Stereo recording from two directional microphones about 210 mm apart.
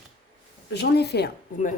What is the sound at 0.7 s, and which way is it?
Speech, 50° left (ahead or behind).